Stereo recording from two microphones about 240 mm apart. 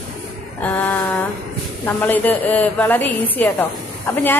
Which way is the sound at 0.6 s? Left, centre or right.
Centre.